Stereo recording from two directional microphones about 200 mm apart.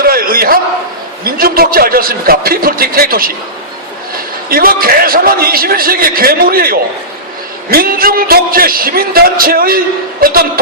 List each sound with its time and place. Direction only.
0.0 s a sound: 45° right (ahead or behind)
1.2 s a man's voice: 50° right (ahead or behind)
4.4 s a man's voice: 45° right (ahead or behind)